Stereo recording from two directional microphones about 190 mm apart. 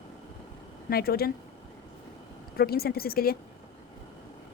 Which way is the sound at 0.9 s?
55° left (ahead or behind).